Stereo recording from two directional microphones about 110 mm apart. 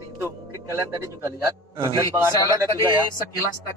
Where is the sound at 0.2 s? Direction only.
30° right (ahead or behind).